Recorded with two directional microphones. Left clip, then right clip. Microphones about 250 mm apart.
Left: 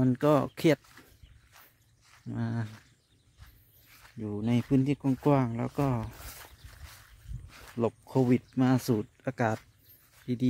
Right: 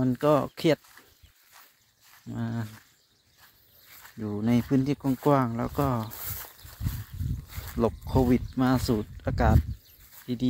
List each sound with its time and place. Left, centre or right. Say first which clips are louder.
0.0 s speech: right 2 dB; centre
1.5 s a sound: right 3 dB; right
2.2 s speech: right 1 dB; centre
4.2 s speech: right 4 dB; centre
6.1 s a sound: right 5 dB; right
7.7 s speech: right 3 dB; centre